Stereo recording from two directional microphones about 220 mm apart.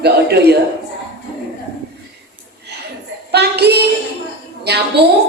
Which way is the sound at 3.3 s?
50° right (ahead or behind).